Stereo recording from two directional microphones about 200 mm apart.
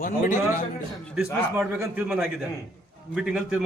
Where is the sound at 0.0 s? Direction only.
45° left (ahead or behind).